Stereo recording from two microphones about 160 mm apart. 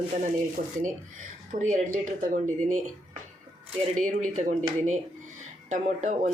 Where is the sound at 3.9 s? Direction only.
55° right (ahead or behind).